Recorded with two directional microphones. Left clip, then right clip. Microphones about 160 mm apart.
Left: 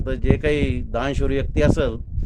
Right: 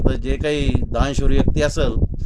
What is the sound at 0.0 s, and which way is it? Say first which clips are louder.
Speech: even; 20° left (ahead or behind).